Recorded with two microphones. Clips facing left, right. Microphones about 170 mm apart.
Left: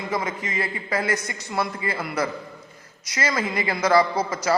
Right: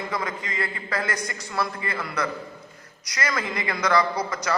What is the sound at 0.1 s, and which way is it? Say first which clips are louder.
A man's voice: left 3 dB; 25° left (ahead or behind).